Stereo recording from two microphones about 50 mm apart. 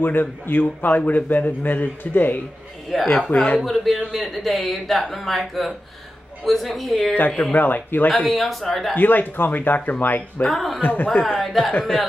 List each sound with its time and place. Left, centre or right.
0.0 s a man's voice: left
2.9 s speech: centre
3.3 s a man's voice: left
3.6 s speech: centre
7.2 s a man's voice: left
8.3 s speech: centre
8.9 s a man's voice: left
10.5 s speech: centre
10.8 s a man's voice: left
11.2 s speech: centre